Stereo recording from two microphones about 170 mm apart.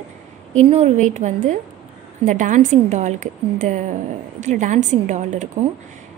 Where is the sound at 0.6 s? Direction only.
40° right (ahead or behind).